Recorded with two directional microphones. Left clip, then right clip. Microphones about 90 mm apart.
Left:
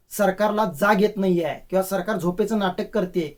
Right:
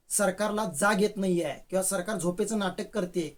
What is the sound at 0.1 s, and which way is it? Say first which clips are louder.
Speech: left 7 dB; 25° right (ahead or behind).